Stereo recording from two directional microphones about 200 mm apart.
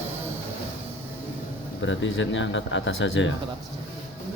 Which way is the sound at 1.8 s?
70° left (ahead or behind).